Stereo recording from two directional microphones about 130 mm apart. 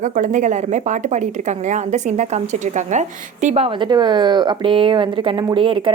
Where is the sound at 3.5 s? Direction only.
50° right (ahead or behind).